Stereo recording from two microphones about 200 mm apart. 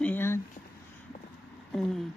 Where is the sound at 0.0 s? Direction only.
10° left (ahead or behind).